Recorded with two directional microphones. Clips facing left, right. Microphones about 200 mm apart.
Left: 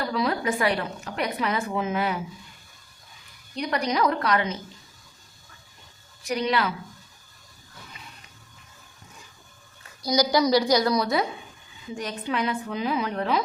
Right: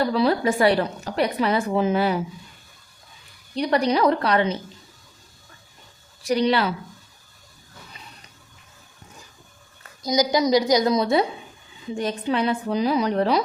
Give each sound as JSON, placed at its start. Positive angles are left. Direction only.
{"t": 0.1, "sound": "a woman's voice", "side_deg": -30}
{"t": 3.5, "sound": "a woman's voice", "side_deg": -30}
{"t": 6.2, "sound": "a woman's voice", "side_deg": -30}
{"t": 10.0, "sound": "a woman's voice", "side_deg": -20}